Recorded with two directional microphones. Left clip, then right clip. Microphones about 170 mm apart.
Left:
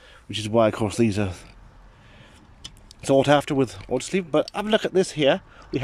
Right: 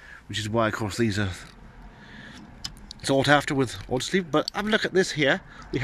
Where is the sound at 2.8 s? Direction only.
10° left (ahead or behind).